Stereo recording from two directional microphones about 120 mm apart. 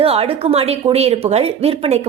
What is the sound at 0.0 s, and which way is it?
Speech, 55° right (ahead or behind).